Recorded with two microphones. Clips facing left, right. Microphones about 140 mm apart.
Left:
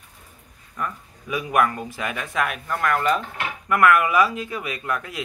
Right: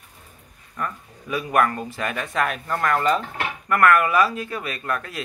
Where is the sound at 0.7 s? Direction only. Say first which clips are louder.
Even; 15° left (ahead or behind).